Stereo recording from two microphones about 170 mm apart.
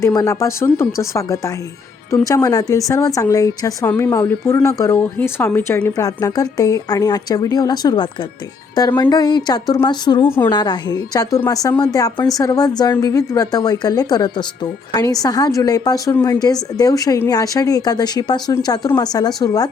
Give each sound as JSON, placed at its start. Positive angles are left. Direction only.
{"t": 0.0, "sound": "a woman's voice", "side_deg": 20}